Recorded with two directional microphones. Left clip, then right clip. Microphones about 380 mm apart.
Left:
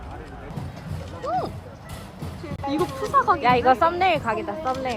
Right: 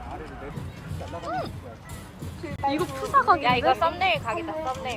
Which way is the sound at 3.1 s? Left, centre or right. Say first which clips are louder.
Even; centre.